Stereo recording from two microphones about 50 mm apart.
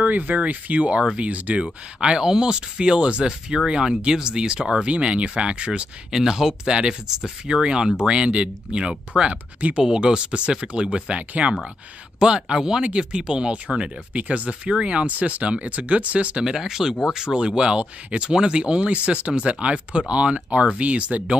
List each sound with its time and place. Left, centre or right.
0.0 s speech: right
16.4 s speech: centre; by 21.4 s right